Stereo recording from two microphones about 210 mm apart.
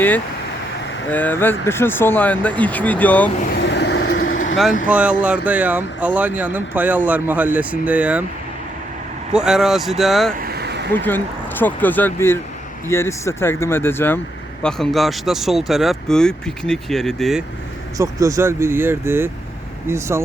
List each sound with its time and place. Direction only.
1.1 s speech: 10° left (ahead or behind)
3.5 s vehicle: 55° left (ahead or behind)
3.9 s vehicle: 85° left
4.9 s speech: 5° right (ahead or behind)
9.3 s speech: 5° right (ahead or behind)
10.3 s vehicle: 45° right (ahead or behind)
10.9 s speech: 10° left (ahead or behind)
17.9 s speech: 15° right (ahead or behind)